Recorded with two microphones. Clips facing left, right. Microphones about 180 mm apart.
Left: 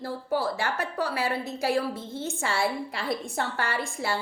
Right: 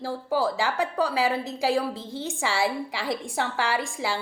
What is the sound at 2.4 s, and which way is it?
A woman's voice, 90° right.